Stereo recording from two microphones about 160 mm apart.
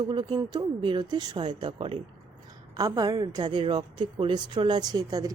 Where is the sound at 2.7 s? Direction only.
20° right (ahead or behind).